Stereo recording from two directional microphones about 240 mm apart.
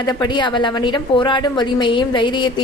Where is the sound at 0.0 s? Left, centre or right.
Centre.